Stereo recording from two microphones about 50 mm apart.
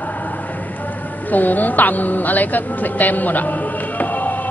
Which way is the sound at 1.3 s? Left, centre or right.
Left.